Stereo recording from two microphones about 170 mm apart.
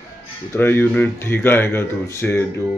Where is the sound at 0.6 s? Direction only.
10° left (ahead or behind).